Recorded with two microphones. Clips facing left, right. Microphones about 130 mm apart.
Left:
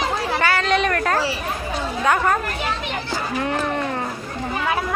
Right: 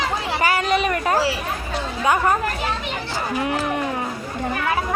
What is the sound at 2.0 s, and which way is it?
Speech, 10° right (ahead or behind).